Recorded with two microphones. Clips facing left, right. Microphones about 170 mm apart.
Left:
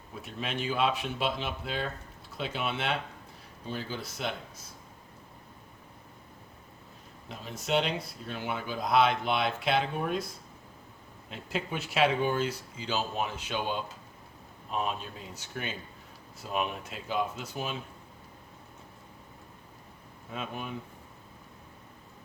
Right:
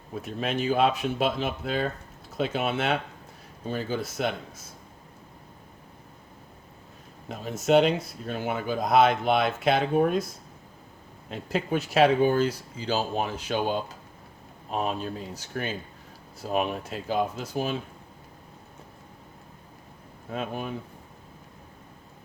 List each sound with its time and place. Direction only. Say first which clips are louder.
0.2 s speech: right 6 dB; 45° right (ahead or behind)
7.3 s speech: right 9 dB; 45° right (ahead or behind)
11.3 s speech: right 7 dB; 40° right (ahead or behind)
20.3 s speech: right 6 dB; 40° right (ahead or behind)